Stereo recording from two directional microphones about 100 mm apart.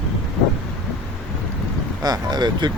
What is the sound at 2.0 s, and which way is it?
Speech, 45° right (ahead or behind).